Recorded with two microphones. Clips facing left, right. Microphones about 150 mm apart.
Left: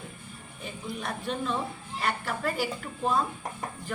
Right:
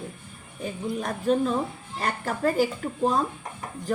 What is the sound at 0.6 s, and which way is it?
A woman's voice, 40° right (ahead or behind).